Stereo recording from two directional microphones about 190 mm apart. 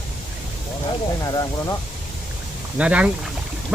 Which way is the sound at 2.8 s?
5° right (ahead or behind).